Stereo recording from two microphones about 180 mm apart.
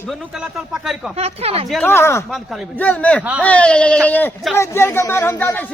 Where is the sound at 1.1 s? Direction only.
35° right (ahead or behind).